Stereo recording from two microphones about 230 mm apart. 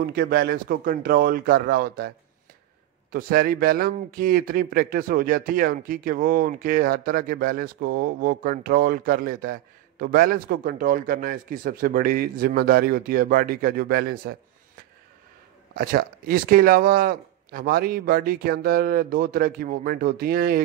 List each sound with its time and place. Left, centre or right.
0.0 s a man's voice: right
15.7 s a man's voice: right